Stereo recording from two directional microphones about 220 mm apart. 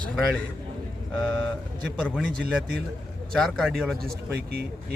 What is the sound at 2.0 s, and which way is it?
Speech, 5° left (ahead or behind).